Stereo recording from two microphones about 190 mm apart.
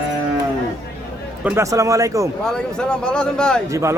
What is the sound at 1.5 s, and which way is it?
Speech, 15° right (ahead or behind).